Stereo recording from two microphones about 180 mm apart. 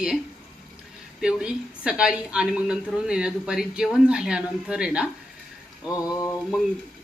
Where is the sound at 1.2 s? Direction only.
5° right (ahead or behind).